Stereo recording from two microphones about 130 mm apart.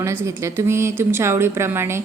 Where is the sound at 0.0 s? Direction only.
20° right (ahead or behind).